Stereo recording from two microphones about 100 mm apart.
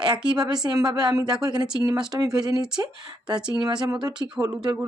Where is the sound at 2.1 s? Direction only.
35° right (ahead or behind).